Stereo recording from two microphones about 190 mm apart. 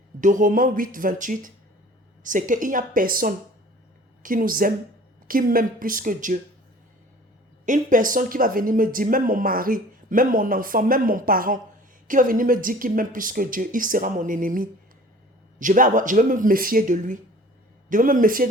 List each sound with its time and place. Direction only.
0.2 s speech: 45° right (ahead or behind)
7.6 s speech: 40° right (ahead or behind)